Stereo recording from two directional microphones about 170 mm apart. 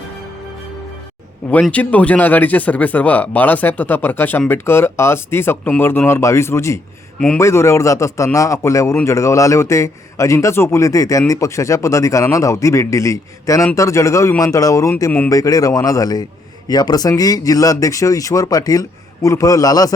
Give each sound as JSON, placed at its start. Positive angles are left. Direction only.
{"t": 1.5, "sound": "speech", "side_deg": 10}